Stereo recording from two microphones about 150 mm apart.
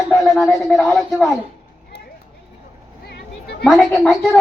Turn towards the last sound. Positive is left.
turn(degrees=0)  # may be behind; listen again after turning